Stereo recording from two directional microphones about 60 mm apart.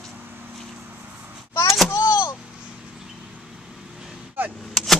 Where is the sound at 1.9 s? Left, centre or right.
Left.